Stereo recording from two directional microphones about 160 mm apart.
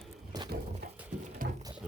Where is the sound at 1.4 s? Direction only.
60° right (ahead or behind).